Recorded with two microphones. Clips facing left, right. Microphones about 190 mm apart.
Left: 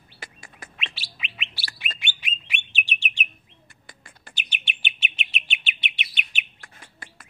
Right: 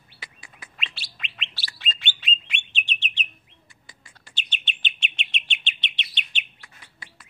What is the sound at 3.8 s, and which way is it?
Bird, 55° left (ahead or behind).